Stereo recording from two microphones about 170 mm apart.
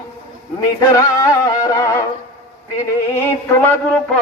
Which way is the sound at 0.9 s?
20° left (ahead or behind).